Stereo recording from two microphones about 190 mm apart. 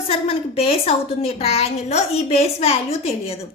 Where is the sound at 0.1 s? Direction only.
30° left (ahead or behind).